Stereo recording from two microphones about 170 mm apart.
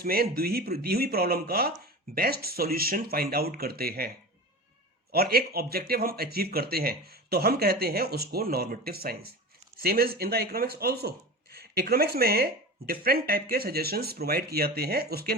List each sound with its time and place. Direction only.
0.0 s speech: 60° right (ahead or behind)
5.1 s speech: 65° right (ahead or behind)